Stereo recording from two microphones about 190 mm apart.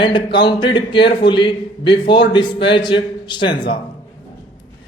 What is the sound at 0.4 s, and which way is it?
A man's voice, 25° left (ahead or behind).